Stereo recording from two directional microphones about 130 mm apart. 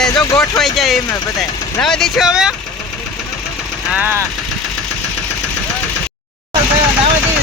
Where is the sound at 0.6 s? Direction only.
Centre (ahead or behind).